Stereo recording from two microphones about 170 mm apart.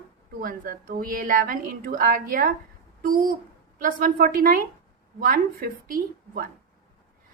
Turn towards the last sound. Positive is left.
turn(degrees=-55)  # may be behind; listen again after turning